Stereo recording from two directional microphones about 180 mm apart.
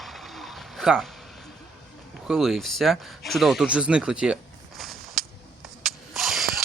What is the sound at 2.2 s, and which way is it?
Speech, centre (ahead or behind).